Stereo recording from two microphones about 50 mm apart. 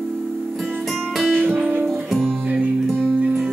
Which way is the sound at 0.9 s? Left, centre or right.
Centre.